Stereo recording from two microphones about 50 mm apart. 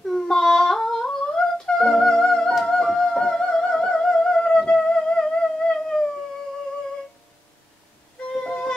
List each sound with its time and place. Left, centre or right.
0.0 s humming: centre
2.6 s music: centre
4.8 s music: centre
8.3 s music: centre